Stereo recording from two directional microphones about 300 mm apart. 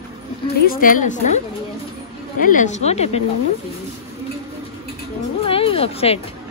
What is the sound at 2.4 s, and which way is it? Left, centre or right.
Speech, left.